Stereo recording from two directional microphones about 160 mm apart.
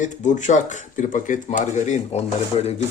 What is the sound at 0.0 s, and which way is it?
Speech, 50° left (ahead or behind).